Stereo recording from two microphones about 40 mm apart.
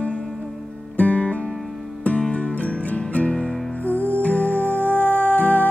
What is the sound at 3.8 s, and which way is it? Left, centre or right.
Music, left.